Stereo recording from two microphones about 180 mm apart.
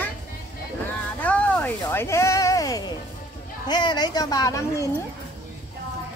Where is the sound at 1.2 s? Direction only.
5° left (ahead or behind).